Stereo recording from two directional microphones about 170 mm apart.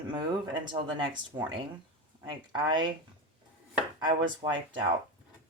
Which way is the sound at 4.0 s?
25° right (ahead or behind).